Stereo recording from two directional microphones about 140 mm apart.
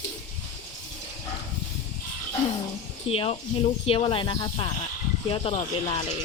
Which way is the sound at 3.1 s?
45° left (ahead or behind).